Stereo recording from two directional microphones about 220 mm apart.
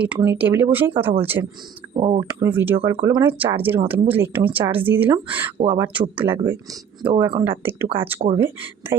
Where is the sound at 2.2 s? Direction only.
10° right (ahead or behind).